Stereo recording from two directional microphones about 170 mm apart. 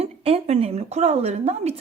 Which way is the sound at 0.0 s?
35° right (ahead or behind).